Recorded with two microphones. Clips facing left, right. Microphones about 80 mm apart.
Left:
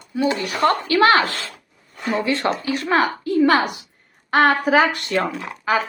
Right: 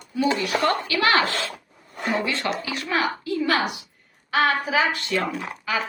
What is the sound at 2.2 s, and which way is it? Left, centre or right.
A woman's voice, left.